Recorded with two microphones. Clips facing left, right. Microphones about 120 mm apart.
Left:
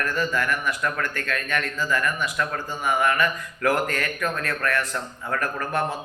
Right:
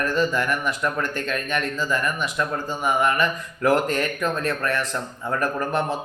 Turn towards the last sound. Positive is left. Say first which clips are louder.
# right 3 dB
turn(degrees=-20)  # may be behind; listen again after turning